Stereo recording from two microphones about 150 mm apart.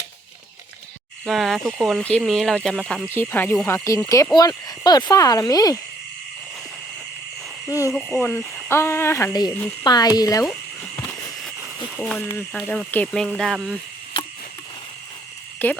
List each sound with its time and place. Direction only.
1.2 s speech: centre (ahead or behind)
4.0 s speech: 20° left (ahead or behind)
7.7 s speech: 20° left (ahead or behind)
7.9 s speech: 5° left (ahead or behind)
8.2 s speech: 15° left (ahead or behind)
11.9 s speech: 10° left (ahead or behind)
15.5 s speech: 10° left (ahead or behind)